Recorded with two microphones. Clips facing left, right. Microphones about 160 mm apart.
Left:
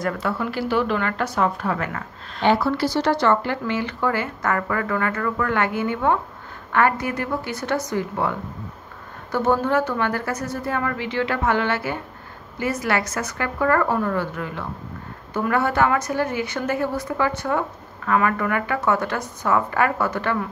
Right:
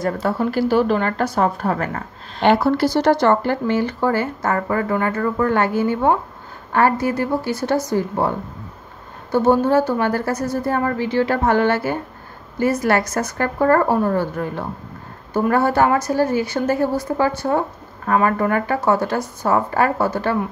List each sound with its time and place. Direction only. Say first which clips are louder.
0.2 s speech: right 6 dB; 40° right (ahead or behind)
2.4 s speech: right 4 dB; 55° right (ahead or behind); by 20.4 s 30° right (ahead or behind)